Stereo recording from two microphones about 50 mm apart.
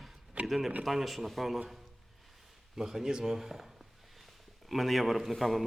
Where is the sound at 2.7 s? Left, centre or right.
Centre.